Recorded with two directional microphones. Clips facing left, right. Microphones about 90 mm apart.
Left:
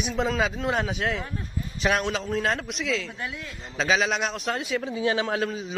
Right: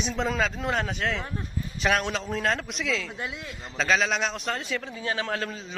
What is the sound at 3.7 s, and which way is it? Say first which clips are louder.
A man's voice: left 1 dB; centre (ahead or behind).